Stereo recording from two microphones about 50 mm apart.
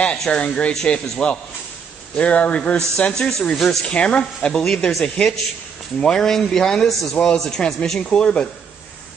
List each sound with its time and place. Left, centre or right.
0.3 s speech: left
3.1 s speech: centre